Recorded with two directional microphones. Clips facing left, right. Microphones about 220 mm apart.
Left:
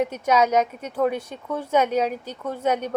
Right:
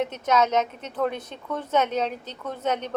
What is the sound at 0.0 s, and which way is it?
A woman's voice, 10° left (ahead or behind).